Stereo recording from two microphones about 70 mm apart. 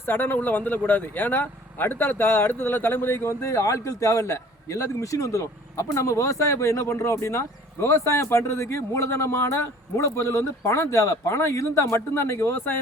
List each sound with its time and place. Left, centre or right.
0.0 s speech: left